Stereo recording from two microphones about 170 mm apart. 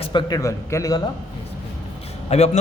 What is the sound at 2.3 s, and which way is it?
Speech, 40° left (ahead or behind).